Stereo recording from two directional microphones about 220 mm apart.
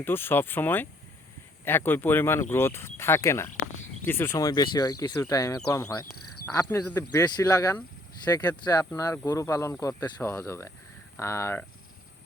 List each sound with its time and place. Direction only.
0.0 s speech: 10° left (ahead or behind)
6.1 s cricket: 90° left
6.4 s speech: 15° left (ahead or behind)